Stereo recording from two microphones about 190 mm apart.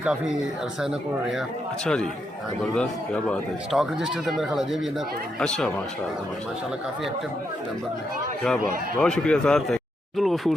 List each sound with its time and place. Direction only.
0.0 s speech: 5° right (ahead or behind)
9.0 s speech: 5° left (ahead or behind)